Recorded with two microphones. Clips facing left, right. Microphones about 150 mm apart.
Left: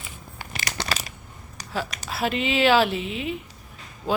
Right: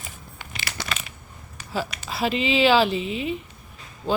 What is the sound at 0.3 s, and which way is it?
Crumpling, 45° left (ahead or behind).